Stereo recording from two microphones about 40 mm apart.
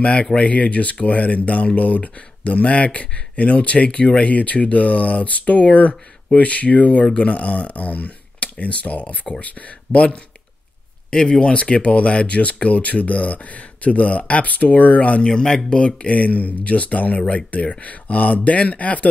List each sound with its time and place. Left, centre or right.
0.0 s speech: left
9.9 s speech: centre
11.1 s speech: centre; by 15.2 s left
15.2 s speech: centre
16.1 s speech: left